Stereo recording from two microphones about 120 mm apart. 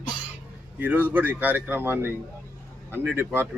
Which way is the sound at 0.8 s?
15° right (ahead or behind).